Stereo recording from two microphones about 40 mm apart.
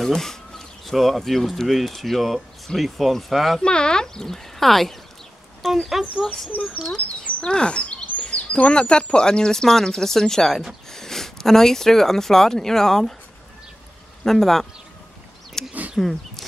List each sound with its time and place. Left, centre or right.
0.0 s speech: centre
3.6 s speech: left; by 6.0 s centre
6.5 s speech: left
7.4 s speech: left
14.2 s speech: centre
15.6 s a sound: centre
16.0 s speech: centre